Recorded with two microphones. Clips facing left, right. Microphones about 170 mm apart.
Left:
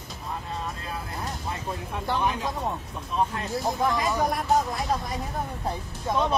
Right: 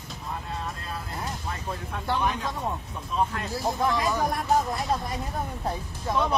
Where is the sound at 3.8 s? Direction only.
Centre (ahead or behind).